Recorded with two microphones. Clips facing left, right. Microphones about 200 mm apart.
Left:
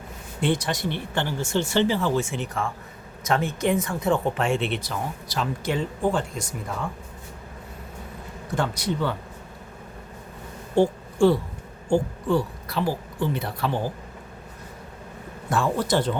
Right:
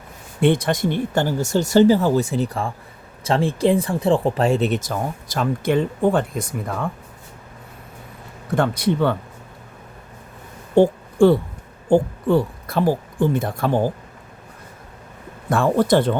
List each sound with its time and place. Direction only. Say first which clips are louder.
0.4 s speech: right 7 dB; 55° right (ahead or behind)
8.5 s speech: right 7 dB; 55° right (ahead or behind)
10.8 s a sound: right 5 dB; 55° right (ahead or behind)
11.9 s speech: right 5 dB; 55° right (ahead or behind)
15.4 s speech: right 7 dB; 55° right (ahead or behind)